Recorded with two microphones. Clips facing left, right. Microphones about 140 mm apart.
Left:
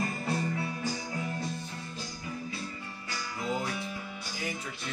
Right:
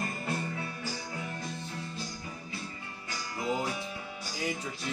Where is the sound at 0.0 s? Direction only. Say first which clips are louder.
Left 2 dB; 5° right (ahead or behind).